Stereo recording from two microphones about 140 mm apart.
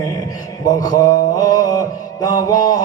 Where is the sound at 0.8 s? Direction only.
25° left (ahead or behind).